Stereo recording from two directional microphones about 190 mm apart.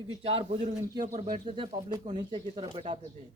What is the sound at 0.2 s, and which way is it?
Speech, 30° right (ahead or behind).